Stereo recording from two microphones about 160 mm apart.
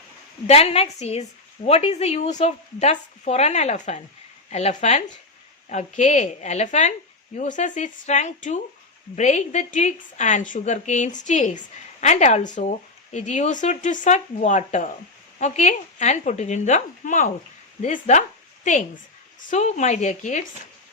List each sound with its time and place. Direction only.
0.4 s a woman's voice: 40° left (ahead or behind)